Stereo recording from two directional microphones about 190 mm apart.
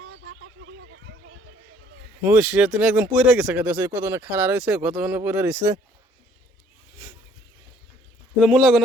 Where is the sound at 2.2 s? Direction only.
5° right (ahead or behind).